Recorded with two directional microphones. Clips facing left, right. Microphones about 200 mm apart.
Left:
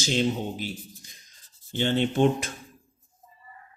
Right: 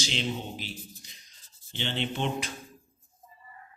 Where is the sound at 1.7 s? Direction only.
45° left (ahead or behind).